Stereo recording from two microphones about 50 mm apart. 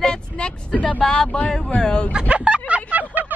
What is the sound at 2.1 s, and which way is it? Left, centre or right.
Music, right.